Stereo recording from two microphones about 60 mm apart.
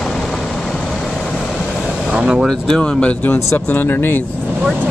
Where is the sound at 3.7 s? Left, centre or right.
Left.